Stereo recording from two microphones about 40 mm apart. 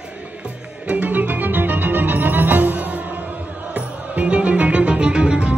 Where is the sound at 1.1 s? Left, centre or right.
Right.